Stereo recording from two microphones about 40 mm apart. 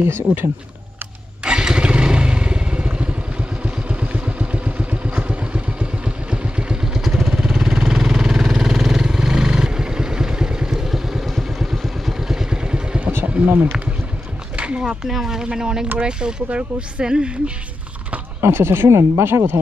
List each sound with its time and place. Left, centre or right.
0.0 s speech: right
1.4 s motorcycle: right
6.9 s vehicle: centre
12.4 s vehicle: right
13.2 s a sound: right
14.6 s a sound: right
15.0 s speech: centre
18.4 s speech: right